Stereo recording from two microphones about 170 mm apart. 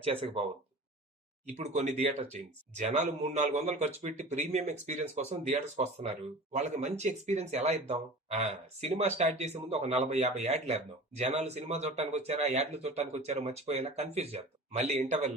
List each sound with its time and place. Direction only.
0.0 s speech: 35° right (ahead or behind)
1.5 s a man's voice: 40° right (ahead or behind)